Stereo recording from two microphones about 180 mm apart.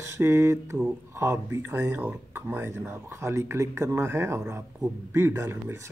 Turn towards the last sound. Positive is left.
turn(degrees=-15)  # may be behind; listen again after turning